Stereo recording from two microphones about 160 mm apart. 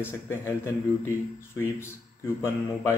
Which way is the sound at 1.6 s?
15° left (ahead or behind).